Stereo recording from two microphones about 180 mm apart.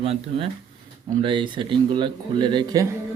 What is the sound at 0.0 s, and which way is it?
Speech, 35° right (ahead or behind).